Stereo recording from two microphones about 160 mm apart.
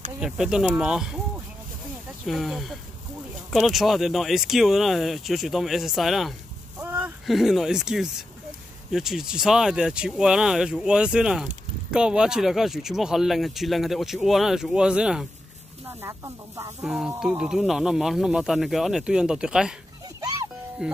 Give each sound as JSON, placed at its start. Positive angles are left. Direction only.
{"t": 0.2, "sound": "speech", "side_deg": -5}
{"t": 2.2, "sound": "speech", "side_deg": 0}
{"t": 6.8, "sound": "a sound", "side_deg": -15}
{"t": 7.2, "sound": "speech", "side_deg": 0}
{"t": 16.0, "sound": "speech", "side_deg": -15}
{"t": 16.8, "sound": "speech", "side_deg": -5}
{"t": 20.8, "sound": "speech", "side_deg": -5}